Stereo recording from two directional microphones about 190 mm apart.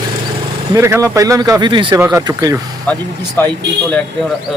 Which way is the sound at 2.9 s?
10° left (ahead or behind).